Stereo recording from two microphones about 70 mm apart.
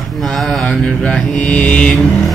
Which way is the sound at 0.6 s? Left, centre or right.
Centre.